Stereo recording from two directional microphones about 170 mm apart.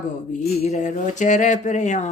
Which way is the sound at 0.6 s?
45° left (ahead or behind).